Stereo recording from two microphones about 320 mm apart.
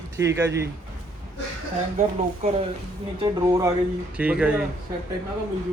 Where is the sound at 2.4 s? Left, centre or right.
Right; by 4.5 s centre.